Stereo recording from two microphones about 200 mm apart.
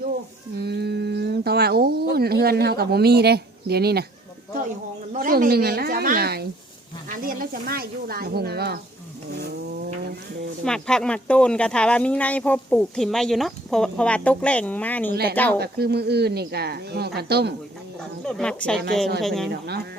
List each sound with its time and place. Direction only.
0.5 s a sound: 55° right (ahead or behind)
5.1 s speech: 40° right (ahead or behind)
10.6 s speech: 5° left (ahead or behind)
15.1 s speech: 55° right (ahead or behind)
18.3 s speech: 5° left (ahead or behind)
19.5 s speech: 55° right (ahead or behind)